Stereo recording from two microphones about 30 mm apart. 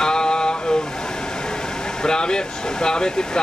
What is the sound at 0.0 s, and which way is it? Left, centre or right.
Vehicle, left.